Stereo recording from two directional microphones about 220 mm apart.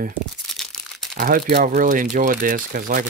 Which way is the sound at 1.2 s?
40° right (ahead or behind).